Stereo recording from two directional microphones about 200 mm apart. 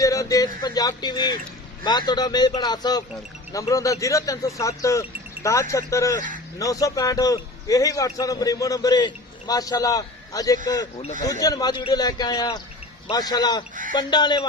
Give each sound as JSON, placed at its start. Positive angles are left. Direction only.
{"t": 0.0, "sound": "a man's voice", "side_deg": 15}